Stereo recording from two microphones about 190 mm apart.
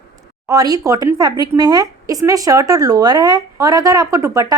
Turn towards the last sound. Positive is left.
turn(degrees=-20)  # may be behind; listen again after turning